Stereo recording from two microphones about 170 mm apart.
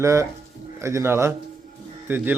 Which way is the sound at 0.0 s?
15° right (ahead or behind).